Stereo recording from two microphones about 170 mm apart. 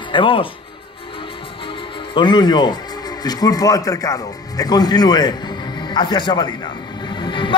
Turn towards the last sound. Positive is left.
turn(degrees=30)  # may be behind; listen again after turning